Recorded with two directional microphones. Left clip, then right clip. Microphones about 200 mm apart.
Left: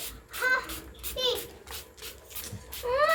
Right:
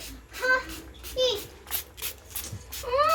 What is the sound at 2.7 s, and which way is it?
Music, 10° right (ahead or behind).